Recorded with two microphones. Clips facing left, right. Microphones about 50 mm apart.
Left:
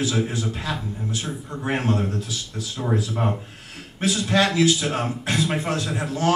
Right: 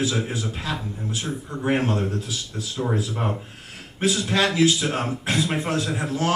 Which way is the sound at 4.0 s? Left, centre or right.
Centre.